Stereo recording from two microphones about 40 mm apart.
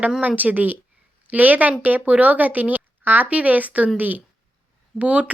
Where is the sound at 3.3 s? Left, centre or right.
Right.